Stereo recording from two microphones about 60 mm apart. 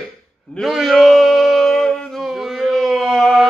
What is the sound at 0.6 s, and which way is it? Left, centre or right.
A man's voice, centre.